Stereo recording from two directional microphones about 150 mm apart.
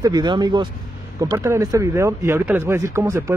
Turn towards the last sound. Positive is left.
turn(degrees=-20)  # may be behind; listen again after turning